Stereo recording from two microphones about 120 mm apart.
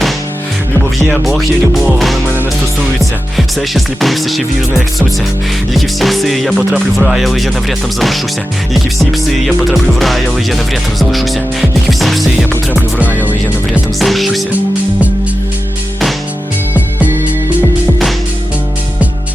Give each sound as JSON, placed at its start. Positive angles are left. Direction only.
{"t": 0.9, "sound": "music", "side_deg": 0}
{"t": 5.7, "sound": "music", "side_deg": 0}
{"t": 9.5, "sound": "music", "side_deg": 0}
{"t": 14.0, "sound": "music", "side_deg": 0}